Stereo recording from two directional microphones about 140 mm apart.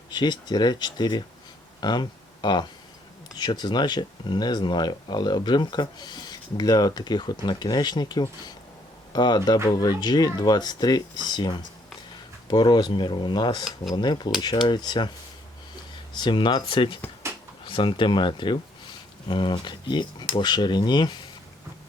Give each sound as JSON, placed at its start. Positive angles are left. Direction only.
{"t": 0.1, "sound": "speech", "side_deg": 30}
{"t": 16.1, "sound": "speech", "side_deg": 35}